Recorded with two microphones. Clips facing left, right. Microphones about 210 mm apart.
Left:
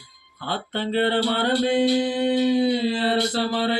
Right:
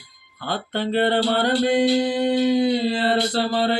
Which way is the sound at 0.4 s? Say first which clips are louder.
Right 2 dB; 40° right (ahead or behind).